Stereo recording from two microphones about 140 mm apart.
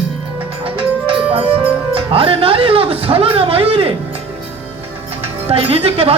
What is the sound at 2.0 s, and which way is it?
Speech, 40° right (ahead or behind).